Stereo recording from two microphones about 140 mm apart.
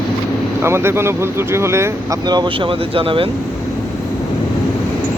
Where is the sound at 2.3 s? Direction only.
35° right (ahead or behind).